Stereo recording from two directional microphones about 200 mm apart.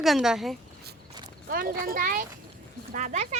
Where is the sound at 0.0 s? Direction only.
Centre (ahead or behind).